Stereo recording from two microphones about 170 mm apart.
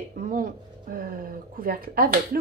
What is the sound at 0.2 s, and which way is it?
Speech, 55° right (ahead or behind).